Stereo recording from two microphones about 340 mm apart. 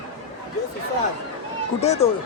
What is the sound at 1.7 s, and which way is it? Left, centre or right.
Speech, centre.